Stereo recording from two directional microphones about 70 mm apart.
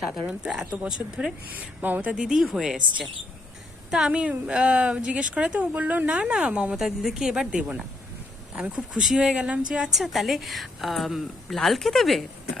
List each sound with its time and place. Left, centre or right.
0.0 s a woman's voice: centre
1.5 s a woman's voice: right
9.9 s a woman's voice: centre